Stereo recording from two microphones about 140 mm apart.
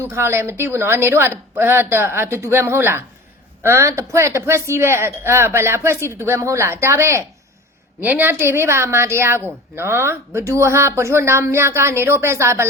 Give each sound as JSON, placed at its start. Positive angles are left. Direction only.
{"t": 0.0, "sound": "a woman's voice", "side_deg": -20}